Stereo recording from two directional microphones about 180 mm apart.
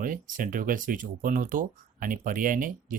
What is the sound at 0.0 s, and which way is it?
Speech, 50° right (ahead or behind).